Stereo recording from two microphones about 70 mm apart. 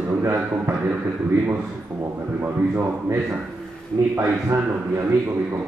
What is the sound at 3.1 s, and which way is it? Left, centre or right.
Speech, right.